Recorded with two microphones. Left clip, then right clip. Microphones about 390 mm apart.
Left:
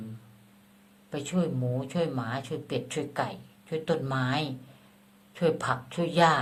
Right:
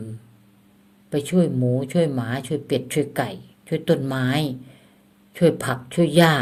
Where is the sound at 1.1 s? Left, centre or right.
Right.